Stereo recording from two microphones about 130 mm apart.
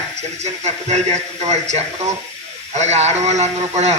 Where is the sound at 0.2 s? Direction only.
60° right (ahead or behind).